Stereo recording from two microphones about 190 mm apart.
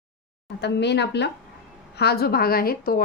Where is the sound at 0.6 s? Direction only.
65° left (ahead or behind).